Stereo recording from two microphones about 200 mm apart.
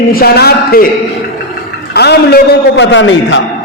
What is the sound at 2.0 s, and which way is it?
A man's voice, 55° left (ahead or behind).